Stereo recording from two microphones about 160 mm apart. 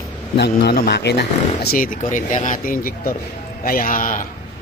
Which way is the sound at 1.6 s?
65° left (ahead or behind).